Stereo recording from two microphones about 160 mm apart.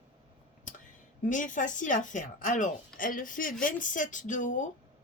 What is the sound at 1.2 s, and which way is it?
Speech, 55° left (ahead or behind).